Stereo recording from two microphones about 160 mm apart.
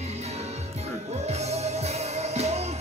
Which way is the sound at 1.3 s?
45° right (ahead or behind).